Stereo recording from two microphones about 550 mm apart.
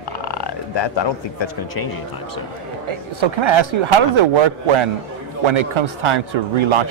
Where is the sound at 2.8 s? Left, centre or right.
Right.